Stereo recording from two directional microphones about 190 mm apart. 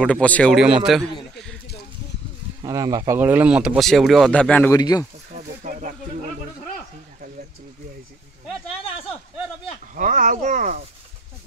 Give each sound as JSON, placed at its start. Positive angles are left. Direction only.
{"t": 0.0, "sound": "speech", "side_deg": 5}
{"t": 2.6, "sound": "speech", "side_deg": -20}
{"t": 4.7, "sound": "speech", "side_deg": 20}
{"t": 5.6, "sound": "snake", "side_deg": -40}
{"t": 9.9, "sound": "a sound", "side_deg": -45}